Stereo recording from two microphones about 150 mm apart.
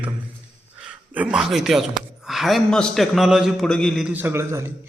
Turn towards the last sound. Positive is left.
turn(degrees=-15)  # may be behind; listen again after turning